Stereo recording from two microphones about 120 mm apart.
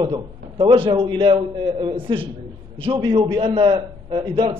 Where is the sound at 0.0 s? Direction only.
40° right (ahead or behind).